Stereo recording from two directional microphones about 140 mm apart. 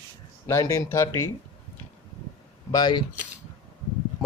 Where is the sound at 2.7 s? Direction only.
30° left (ahead or behind).